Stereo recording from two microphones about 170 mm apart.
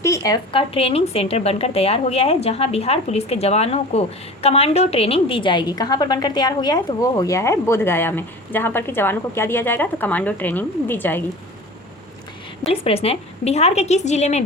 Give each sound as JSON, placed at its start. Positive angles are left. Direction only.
{"t": 0.0, "sound": "a sound", "side_deg": 20}
{"t": 0.5, "sound": "a woman's voice", "side_deg": 35}
{"t": 12.6, "sound": "a woman's voice", "side_deg": 35}